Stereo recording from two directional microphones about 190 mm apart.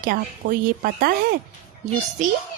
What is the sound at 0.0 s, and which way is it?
Speech, 50° right (ahead or behind).